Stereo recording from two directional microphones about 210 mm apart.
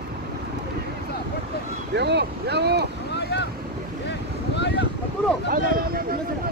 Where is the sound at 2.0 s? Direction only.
55° right (ahead or behind).